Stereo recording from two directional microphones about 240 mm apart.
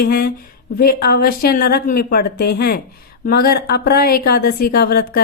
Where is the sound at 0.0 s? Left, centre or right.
Left.